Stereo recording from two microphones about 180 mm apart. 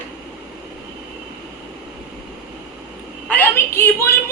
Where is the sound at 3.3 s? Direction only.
10° left (ahead or behind).